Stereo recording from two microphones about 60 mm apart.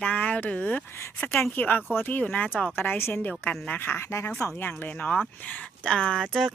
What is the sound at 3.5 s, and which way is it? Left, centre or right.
Speech, left.